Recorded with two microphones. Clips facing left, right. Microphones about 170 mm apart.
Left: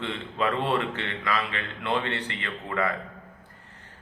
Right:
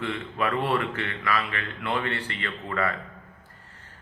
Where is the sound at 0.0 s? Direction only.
20° left (ahead or behind).